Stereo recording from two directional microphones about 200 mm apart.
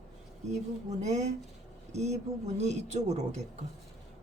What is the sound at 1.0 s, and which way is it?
Speech, 35° right (ahead or behind).